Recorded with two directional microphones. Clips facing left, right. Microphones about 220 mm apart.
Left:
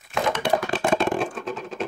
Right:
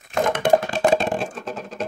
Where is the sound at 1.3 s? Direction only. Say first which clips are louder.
Left 1 dB; 40° right (ahead or behind).